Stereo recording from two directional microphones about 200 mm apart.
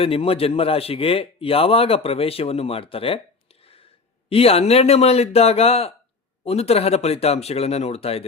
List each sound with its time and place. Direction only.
0.0 s a man's voice: 30° left (ahead or behind)